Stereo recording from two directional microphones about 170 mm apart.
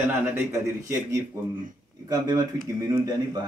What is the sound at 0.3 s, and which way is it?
A man's voice, 15° right (ahead or behind).